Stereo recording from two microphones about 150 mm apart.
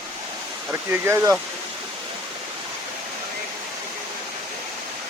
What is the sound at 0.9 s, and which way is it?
Speech, 15° right (ahead or behind).